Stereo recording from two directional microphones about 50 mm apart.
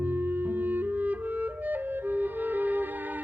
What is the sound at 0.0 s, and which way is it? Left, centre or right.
Clarinet, right.